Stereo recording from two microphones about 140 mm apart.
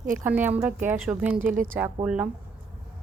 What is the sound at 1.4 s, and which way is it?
Speech, 70° right (ahead or behind).